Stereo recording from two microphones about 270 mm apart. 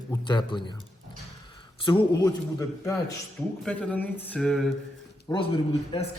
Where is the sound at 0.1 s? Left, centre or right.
Centre.